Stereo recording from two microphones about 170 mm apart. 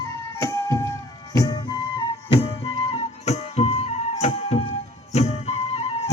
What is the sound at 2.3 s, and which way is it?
Flute, 35° left (ahead or behind).